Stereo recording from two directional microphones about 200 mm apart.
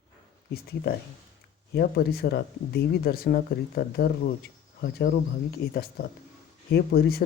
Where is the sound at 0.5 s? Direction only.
50° left (ahead or behind).